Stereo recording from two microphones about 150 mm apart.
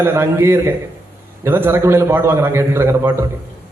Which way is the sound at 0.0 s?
15° right (ahead or behind).